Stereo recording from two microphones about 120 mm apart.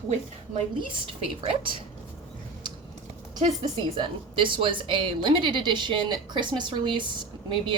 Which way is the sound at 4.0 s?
45° right (ahead or behind).